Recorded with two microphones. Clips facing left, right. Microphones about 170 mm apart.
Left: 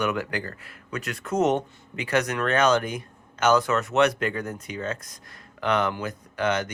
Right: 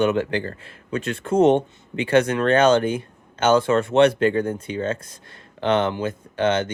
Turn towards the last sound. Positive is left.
turn(degrees=-30)  # may be behind; listen again after turning